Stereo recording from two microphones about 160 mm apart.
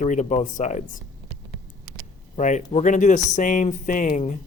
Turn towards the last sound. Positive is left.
turn(degrees=50)  # may be behind; listen again after turning